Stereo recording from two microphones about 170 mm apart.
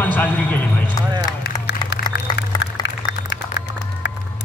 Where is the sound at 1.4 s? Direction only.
90° left.